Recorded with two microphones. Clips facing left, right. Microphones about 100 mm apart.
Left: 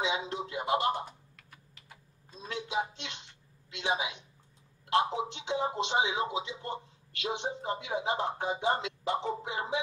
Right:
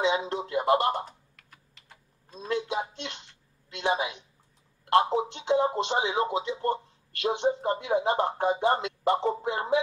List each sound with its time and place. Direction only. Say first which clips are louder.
0.0 s speech: right 6 dB; 55° right (ahead or behind)
2.4 s a man's voice: right 4 dB; 55° right (ahead or behind)